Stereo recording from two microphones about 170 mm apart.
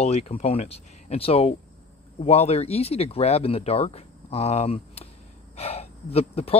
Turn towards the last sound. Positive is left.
turn(degrees=35)  # may be behind; listen again after turning